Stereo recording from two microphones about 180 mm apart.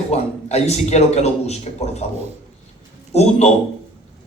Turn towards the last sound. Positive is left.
turn(degrees=35)  # may be behind; listen again after turning